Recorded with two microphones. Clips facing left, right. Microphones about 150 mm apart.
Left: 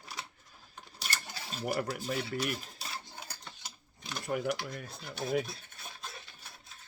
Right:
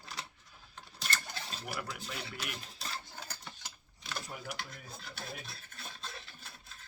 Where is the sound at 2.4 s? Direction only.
5° left (ahead or behind).